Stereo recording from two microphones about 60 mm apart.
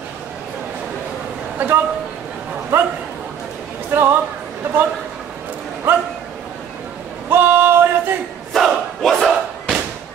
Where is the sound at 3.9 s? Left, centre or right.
Right.